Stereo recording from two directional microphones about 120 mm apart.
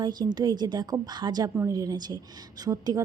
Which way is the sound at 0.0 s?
35° right (ahead or behind).